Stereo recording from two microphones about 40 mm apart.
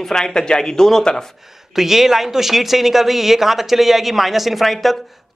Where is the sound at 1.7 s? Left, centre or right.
Centre.